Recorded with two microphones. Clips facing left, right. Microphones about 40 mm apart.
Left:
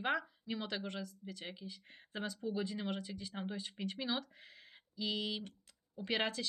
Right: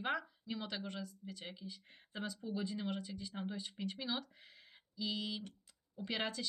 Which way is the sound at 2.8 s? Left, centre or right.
Left.